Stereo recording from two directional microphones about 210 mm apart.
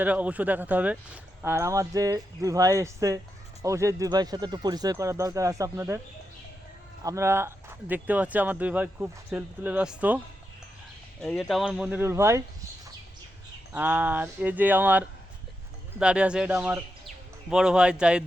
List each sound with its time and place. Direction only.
0.0 s speech: 5° right (ahead or behind)
7.0 s speech: 15° right (ahead or behind)
11.2 s speech: centre (ahead or behind)
13.7 s speech: 10° right (ahead or behind)